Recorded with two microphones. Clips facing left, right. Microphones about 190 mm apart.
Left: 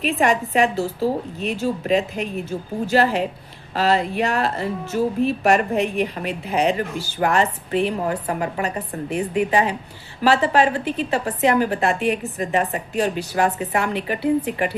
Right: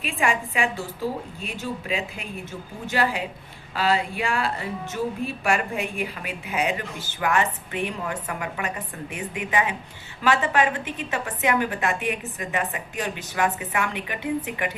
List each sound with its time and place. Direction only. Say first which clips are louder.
0.0 s a woman's voice: left 6 dB; 40° left (ahead or behind)